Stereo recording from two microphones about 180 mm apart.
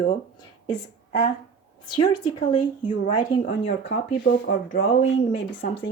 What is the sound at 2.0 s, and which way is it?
A woman's voice, 30° left (ahead or behind).